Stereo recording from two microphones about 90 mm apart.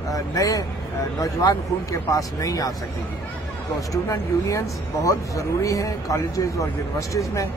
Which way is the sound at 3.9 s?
35° left (ahead or behind).